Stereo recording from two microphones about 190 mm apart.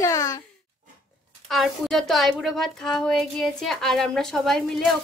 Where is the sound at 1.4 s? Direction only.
Centre (ahead or behind).